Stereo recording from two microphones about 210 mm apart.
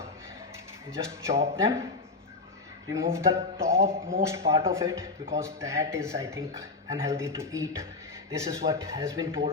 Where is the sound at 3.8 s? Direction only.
40° right (ahead or behind).